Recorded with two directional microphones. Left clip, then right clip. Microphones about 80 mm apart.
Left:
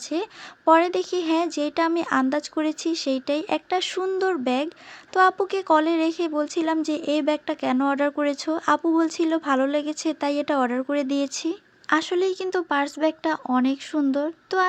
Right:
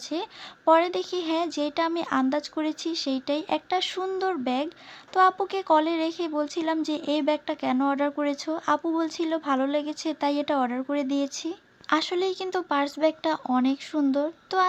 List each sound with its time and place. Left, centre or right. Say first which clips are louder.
0.1 s speech: left 4 dB; left
5.1 s speech: left 2 dB; left
11.9 s speech: left 3 dB; left